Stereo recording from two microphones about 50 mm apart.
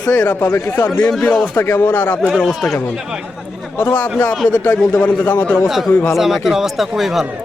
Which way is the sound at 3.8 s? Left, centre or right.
Left.